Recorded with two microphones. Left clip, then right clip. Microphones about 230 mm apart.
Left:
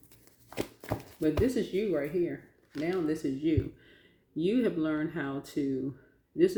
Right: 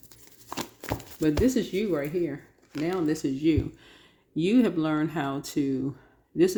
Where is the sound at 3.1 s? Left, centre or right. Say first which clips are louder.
Right 5 dB; right.